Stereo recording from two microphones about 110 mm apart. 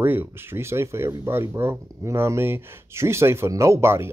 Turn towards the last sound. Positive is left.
turn(degrees=-25)  # may be behind; listen again after turning